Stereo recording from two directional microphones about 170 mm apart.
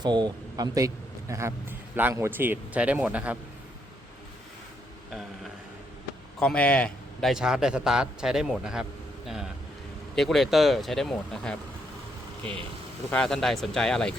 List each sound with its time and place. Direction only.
0.0 s a man's voice: 25° right (ahead or behind); by 3.3 s 10° right (ahead or behind)
6.4 s a man's voice: 5° left (ahead or behind)
13.1 s speech: 5° left (ahead or behind)